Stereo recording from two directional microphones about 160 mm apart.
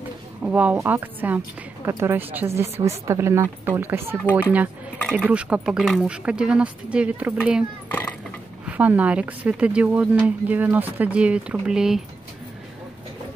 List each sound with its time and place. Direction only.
0.4 s speech: 10° right (ahead or behind)
4.2 s speech: 10° left (ahead or behind)
5.1 s speech: 10° right (ahead or behind)
8.6 s speech: 10° right (ahead or behind)